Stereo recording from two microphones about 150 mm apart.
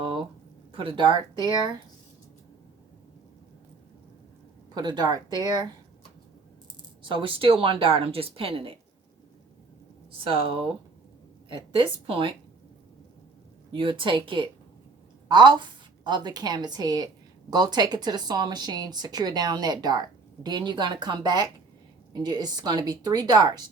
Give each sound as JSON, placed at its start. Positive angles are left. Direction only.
{"t": 0.0, "sound": "a sound", "side_deg": -35}
{"t": 0.7, "sound": "speech", "side_deg": -35}
{"t": 4.7, "sound": "speech", "side_deg": -30}
{"t": 7.0, "sound": "speech", "side_deg": -35}
{"t": 10.1, "sound": "speech", "side_deg": -35}
{"t": 13.7, "sound": "speech", "side_deg": -35}